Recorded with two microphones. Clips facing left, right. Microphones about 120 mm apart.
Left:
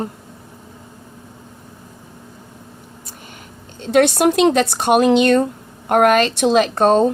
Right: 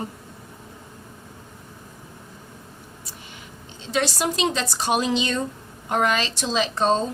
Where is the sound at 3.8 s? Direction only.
60° left (ahead or behind).